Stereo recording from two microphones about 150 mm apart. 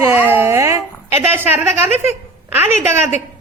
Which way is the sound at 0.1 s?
15° right (ahead or behind).